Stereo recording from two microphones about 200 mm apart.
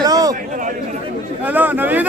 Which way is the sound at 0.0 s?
20° right (ahead or behind).